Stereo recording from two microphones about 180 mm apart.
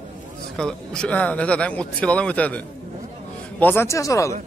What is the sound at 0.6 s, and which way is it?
Speech, 5° left (ahead or behind).